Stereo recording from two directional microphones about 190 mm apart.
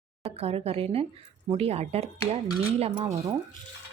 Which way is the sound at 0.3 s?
30° right (ahead or behind).